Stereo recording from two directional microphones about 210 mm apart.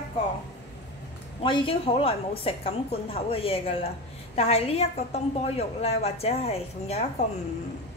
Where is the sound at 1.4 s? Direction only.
25° left (ahead or behind).